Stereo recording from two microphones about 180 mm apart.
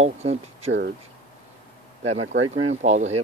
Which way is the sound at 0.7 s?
70° right (ahead or behind).